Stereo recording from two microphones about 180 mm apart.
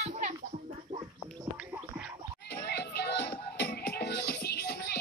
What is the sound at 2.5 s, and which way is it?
Music, 70° left (ahead or behind).